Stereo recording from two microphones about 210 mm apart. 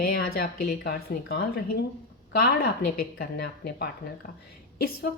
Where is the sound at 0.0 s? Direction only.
45° left (ahead or behind).